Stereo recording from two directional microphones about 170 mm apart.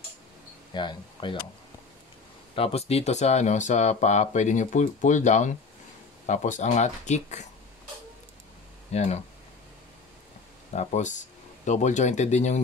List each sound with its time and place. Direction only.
0.7 s speech: 25° left (ahead or behind)
2.5 s speech: 35° left (ahead or behind)
8.9 s speech: 40° left (ahead or behind)
10.7 s speech: 45° left (ahead or behind)